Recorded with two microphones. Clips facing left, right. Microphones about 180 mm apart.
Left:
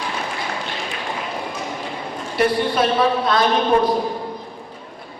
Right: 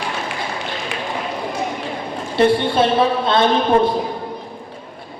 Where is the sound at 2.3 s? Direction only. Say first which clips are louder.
Right 4 dB; 25° right (ahead or behind).